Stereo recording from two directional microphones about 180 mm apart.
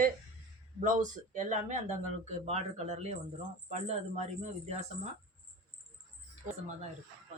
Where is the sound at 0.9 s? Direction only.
45° right (ahead or behind).